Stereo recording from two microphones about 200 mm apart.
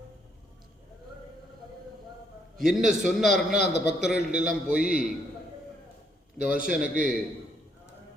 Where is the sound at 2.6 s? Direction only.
Centre (ahead or behind).